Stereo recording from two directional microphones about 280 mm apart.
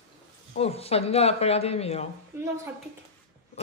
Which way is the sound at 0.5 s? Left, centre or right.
Left.